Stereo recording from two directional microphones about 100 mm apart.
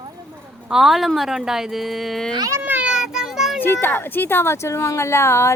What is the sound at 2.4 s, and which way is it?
Speech, 35° right (ahead or behind).